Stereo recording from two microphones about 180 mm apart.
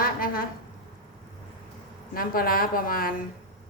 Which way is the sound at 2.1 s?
55° left (ahead or behind).